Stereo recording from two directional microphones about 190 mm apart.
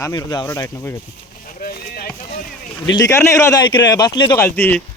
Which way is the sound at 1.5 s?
50° left (ahead or behind).